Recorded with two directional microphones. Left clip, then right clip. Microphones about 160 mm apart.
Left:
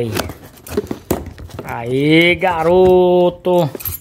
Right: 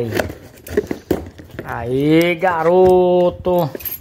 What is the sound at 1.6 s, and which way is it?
Speech, 20° left (ahead or behind).